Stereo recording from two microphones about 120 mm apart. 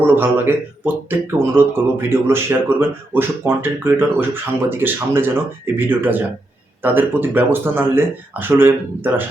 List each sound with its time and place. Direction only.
0.0 s speech: 15° right (ahead or behind)